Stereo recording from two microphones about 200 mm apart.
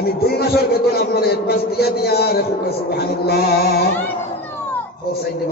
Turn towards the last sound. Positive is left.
turn(degrees=50)  # may be behind; listen again after turning